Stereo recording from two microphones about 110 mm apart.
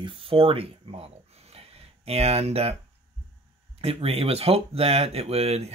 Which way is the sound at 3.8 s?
65° right (ahead or behind).